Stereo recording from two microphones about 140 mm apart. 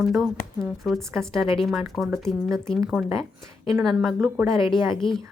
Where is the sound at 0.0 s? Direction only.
Centre (ahead or behind).